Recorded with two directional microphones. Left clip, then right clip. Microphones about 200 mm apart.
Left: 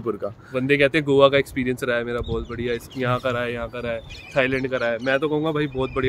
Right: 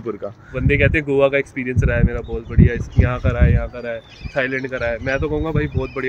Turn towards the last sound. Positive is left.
turn(degrees=20)  # may be behind; listen again after turning